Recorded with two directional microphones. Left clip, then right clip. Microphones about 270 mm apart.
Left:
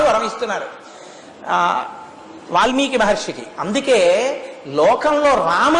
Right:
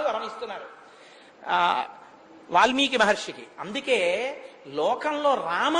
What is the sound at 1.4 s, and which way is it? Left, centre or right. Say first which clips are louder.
A man's voice: left 6 dB; right.